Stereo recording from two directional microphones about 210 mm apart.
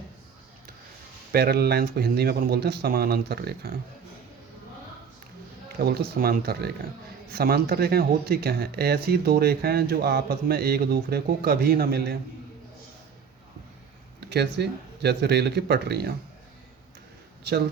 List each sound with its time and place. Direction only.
1.3 s speech: 45° right (ahead or behind)
5.8 s speech: 45° right (ahead or behind)
14.2 s speech: 50° right (ahead or behind)